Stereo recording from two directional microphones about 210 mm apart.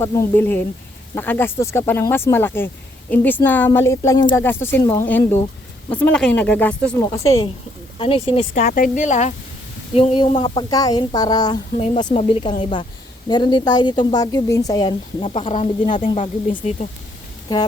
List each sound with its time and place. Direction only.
0.0 s a woman's voice: 10° left (ahead or behind)
7.9 s a woman's voice: 25° left (ahead or behind)